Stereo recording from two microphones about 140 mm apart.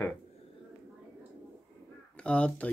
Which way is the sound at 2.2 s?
10° left (ahead or behind).